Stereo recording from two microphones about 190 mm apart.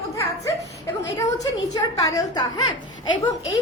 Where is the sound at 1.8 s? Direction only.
20° left (ahead or behind).